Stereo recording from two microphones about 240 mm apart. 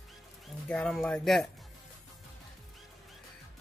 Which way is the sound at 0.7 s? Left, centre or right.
Centre.